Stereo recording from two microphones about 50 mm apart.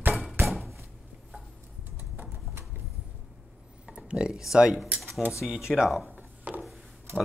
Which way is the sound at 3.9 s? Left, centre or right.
Right.